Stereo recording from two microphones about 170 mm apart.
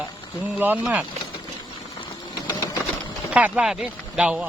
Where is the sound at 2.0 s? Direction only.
25° left (ahead or behind).